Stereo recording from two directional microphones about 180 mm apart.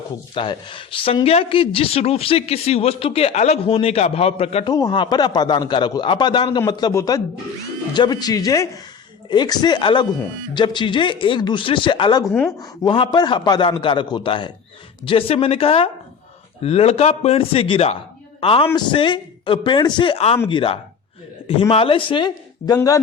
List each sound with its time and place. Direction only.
0.3 s speech: 30° left (ahead or behind)
4.7 s speech: 25° left (ahead or behind)